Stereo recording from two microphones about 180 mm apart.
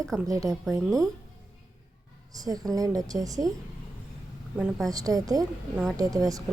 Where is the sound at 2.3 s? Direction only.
20° right (ahead or behind).